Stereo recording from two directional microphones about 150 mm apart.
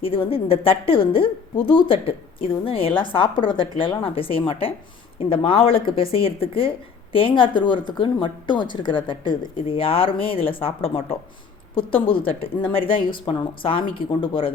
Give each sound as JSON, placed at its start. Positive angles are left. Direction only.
{"t": 0.0, "sound": "a woman's voice", "side_deg": 40}